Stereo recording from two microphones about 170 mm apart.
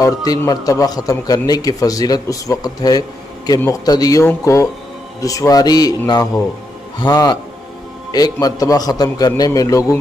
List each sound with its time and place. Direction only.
0.0 s a man's voice: 20° left (ahead or behind)